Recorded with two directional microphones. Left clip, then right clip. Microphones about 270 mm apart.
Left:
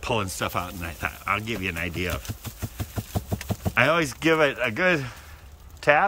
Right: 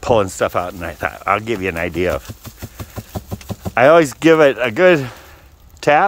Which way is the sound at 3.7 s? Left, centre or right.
Centre.